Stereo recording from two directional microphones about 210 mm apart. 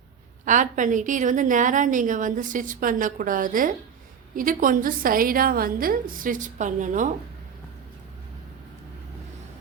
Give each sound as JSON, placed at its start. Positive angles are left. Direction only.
{"t": 0.4, "sound": "a woman's voice", "side_deg": -35}